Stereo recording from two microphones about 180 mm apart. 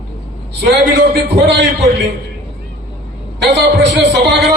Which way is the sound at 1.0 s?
75° right (ahead or behind).